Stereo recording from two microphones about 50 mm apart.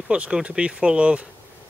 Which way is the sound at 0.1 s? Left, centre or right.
Centre.